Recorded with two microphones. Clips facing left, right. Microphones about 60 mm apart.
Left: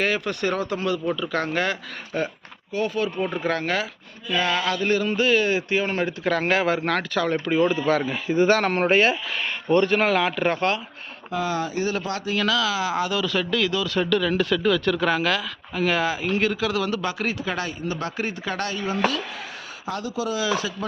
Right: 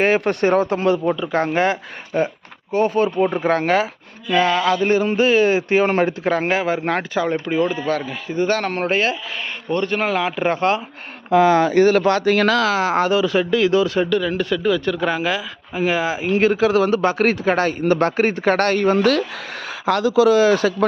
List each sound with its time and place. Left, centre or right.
0.0 s speech: right
2.7 s speech: right
4.4 s speech: centre
6.3 s speech: centre
6.6 s speech: centre
7.9 s speech: centre
11.3 s speech: right
12.4 s speech: right
13.1 s speech: right
14.1 s speech: centre; by 19.2 s right
19.8 s speech: right
20.4 s speech: right